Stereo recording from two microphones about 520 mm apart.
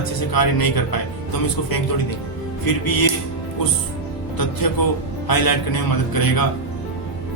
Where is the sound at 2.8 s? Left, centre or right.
Left.